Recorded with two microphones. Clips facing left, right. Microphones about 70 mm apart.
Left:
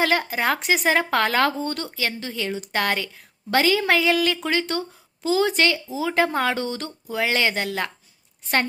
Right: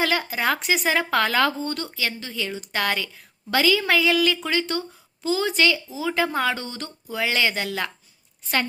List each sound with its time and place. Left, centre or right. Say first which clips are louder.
0.0 s speech: left 2 dB; left
1.6 s speech: left 1 dB; left
4.7 s speech: left 1 dB; left
5.2 s a woman's voice: left 2 dB; left
6.6 s a woman's voice: left 6 dB; left
7.2 s speech: left 1 dB; left